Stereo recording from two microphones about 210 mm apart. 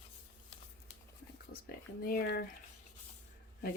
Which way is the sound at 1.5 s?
45° left (ahead or behind).